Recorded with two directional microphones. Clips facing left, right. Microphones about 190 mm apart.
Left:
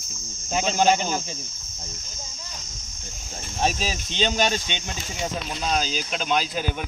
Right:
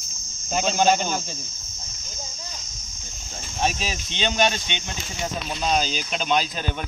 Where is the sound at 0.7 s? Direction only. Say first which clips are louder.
Even; 5° left (ahead or behind).